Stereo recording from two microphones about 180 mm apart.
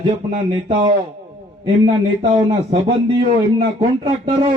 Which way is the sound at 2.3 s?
30° right (ahead or behind).